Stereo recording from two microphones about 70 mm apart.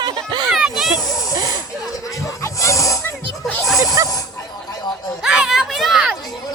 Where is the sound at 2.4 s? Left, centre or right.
Left.